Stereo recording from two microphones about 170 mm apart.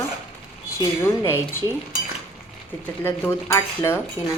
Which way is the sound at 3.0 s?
10° left (ahead or behind).